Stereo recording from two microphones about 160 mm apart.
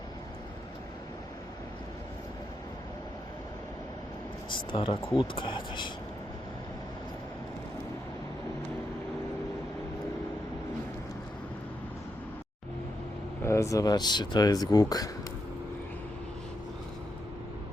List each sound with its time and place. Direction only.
4.4 s a sound: 30° left (ahead or behind)
5.1 s speech: 30° left (ahead or behind)
13.4 s speech: 15° left (ahead or behind)